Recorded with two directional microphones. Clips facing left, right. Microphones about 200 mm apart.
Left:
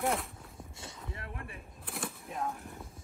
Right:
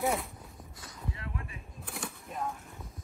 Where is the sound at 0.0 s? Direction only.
Centre (ahead or behind).